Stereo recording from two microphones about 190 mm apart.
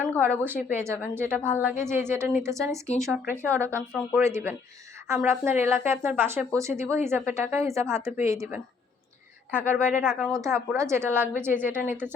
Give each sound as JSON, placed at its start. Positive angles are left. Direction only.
{"t": 0.4, "sound": "a woman's voice", "side_deg": -10}
{"t": 1.4, "sound": "speech", "side_deg": 10}
{"t": 1.8, "sound": "a woman's voice", "side_deg": -10}
{"t": 3.4, "sound": "speech", "side_deg": 10}
{"t": 4.2, "sound": "a woman's voice", "side_deg": -15}
{"t": 10.0, "sound": "speech", "side_deg": 0}
{"t": 10.3, "sound": "a woman's voice", "side_deg": -15}